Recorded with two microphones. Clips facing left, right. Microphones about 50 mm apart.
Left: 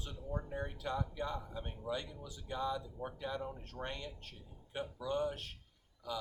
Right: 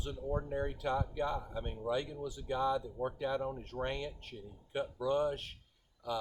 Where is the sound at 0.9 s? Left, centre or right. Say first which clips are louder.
Right 4 dB; right.